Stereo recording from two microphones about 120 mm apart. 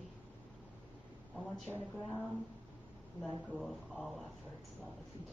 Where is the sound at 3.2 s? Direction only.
Centre (ahead or behind).